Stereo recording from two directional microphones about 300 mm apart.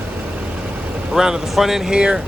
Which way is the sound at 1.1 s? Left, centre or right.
Centre.